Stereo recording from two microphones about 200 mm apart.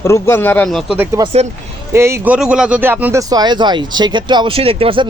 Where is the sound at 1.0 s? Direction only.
15° right (ahead or behind).